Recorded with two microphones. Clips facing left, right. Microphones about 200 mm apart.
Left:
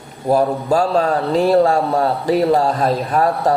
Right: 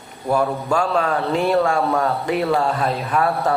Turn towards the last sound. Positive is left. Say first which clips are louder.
# left 3 dB
turn(degrees=35)  # may be behind; listen again after turning